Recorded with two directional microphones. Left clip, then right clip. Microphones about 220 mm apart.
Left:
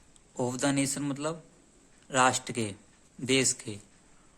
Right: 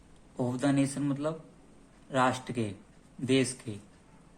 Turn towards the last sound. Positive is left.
turn(degrees=25)  # may be behind; listen again after turning